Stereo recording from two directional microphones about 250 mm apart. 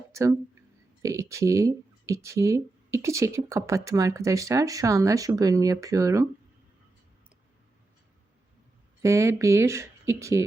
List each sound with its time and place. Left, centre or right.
0.1 s speech: centre
9.0 s speech: centre